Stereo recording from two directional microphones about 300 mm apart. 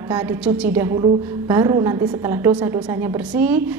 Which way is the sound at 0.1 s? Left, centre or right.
Centre.